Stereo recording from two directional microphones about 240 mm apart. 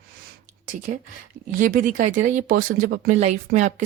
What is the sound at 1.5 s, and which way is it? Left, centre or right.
Speech, right.